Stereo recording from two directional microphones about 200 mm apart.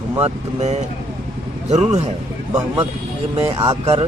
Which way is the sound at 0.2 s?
35° right (ahead or behind).